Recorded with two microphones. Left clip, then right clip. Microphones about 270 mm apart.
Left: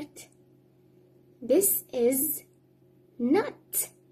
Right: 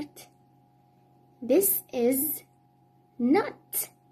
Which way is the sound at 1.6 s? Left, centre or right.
Centre.